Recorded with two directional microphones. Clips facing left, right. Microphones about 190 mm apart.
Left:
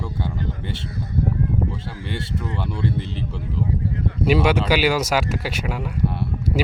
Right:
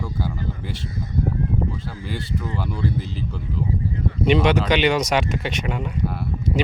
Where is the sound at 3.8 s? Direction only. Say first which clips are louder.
Even; 60° left (ahead or behind).